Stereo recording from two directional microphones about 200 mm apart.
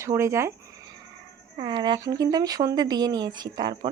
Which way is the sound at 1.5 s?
25° right (ahead or behind).